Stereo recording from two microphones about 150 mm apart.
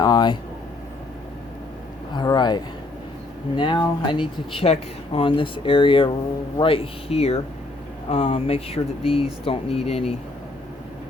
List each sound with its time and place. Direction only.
0.0 s air conditioning: 30° left (ahead or behind)
2.1 s a sound: 30° left (ahead or behind)
3.6 s speech: 35° left (ahead or behind)